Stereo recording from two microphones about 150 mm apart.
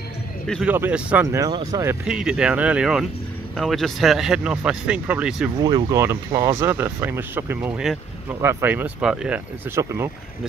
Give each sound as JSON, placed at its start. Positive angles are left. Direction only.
{"t": 0.7, "sound": "speech", "side_deg": -10}
{"t": 1.2, "sound": "speech", "side_deg": -20}
{"t": 2.0, "sound": "speech", "side_deg": -5}
{"t": 5.6, "sound": "speech", "side_deg": -25}
{"t": 9.8, "sound": "speech", "side_deg": -15}